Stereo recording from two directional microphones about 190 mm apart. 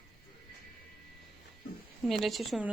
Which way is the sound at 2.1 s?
Centre (ahead or behind).